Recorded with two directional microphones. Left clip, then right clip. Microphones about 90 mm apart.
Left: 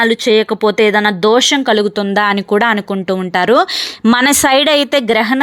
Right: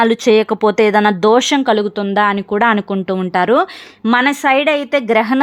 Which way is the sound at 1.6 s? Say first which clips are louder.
Left 2 dB; 15° left (ahead or behind).